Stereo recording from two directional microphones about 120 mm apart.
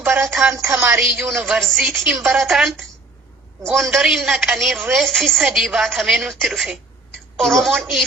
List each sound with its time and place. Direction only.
0.0 s a sound: 20° right (ahead or behind)
0.3 s a woman's voice: centre (ahead or behind)
0.5 s a woman's voice: 25° right (ahead or behind)
1.1 s a woman's voice: 5° right (ahead or behind)